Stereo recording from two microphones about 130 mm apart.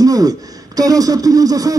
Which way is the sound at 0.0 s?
30° right (ahead or behind).